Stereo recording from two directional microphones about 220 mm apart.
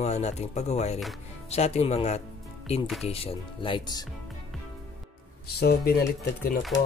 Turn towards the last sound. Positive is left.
turn(degrees=40)  # may be behind; listen again after turning